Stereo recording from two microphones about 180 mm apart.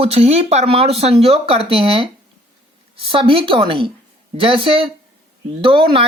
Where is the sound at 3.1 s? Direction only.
30° right (ahead or behind).